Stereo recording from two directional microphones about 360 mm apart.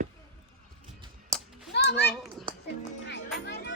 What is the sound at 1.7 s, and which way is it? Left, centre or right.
Children playing, left.